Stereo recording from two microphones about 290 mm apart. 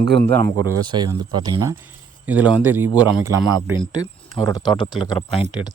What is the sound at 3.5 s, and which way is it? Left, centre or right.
Speech, right.